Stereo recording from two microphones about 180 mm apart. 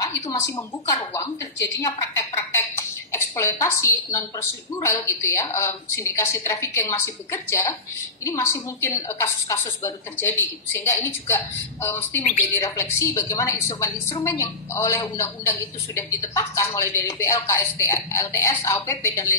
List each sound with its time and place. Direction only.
0.3 s a woman's voice: 20° left (ahead or behind)